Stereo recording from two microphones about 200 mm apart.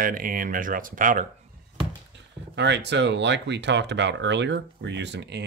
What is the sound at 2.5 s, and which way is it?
Speech, 60° right (ahead or behind).